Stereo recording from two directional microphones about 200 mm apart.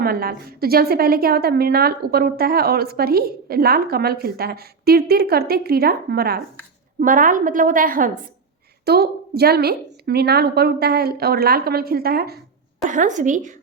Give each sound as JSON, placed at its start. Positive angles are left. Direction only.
{"t": 0.0, "sound": "a woman's voice", "side_deg": -50}
{"t": 12.8, "sound": "a woman's voice", "side_deg": -40}